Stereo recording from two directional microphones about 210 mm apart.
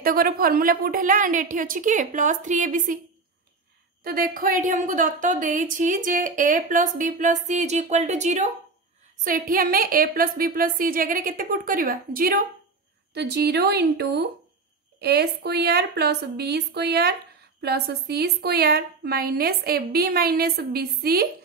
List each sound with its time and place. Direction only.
0.0 s a woman's voice: 45° right (ahead or behind)
4.0 s a woman's voice: 45° right (ahead or behind)